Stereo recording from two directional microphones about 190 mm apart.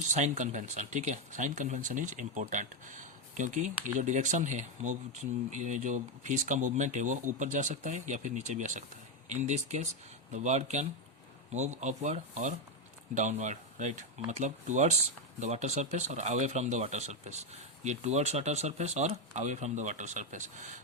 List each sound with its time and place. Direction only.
0.1 s speech: 40° right (ahead or behind)